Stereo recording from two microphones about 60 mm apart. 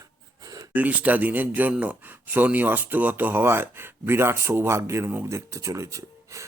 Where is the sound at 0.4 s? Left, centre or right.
Right.